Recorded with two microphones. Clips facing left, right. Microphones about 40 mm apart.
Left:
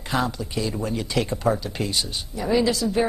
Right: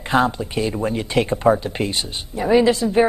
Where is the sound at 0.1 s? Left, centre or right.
Right.